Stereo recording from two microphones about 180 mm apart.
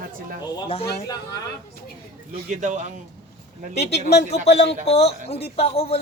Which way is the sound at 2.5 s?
40° right (ahead or behind).